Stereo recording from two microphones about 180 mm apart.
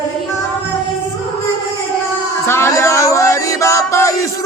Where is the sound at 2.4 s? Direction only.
15° left (ahead or behind).